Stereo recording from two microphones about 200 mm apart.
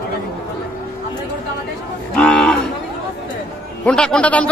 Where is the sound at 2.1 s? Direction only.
5° left (ahead or behind).